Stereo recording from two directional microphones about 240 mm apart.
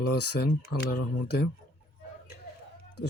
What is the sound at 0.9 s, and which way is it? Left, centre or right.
Speech, left.